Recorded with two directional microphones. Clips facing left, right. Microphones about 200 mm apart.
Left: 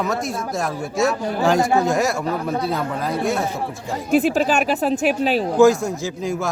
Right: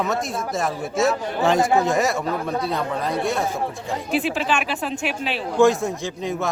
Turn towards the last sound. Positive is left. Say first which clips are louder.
# left 2 dB
turn(degrees=0)  # may be behind; listen again after turning